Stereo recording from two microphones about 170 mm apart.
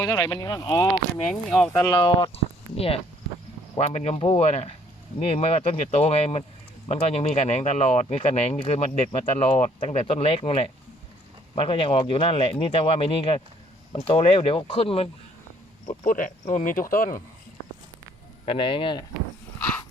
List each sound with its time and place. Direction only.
0.0 s speech: 20° left (ahead or behind)
1.3 s speech: 5° left (ahead or behind)
1.7 s speech: 20° left (ahead or behind); by 15.1 s 35° left (ahead or behind)
16.0 s speech: 50° left (ahead or behind)
18.4 s speech: 30° left (ahead or behind)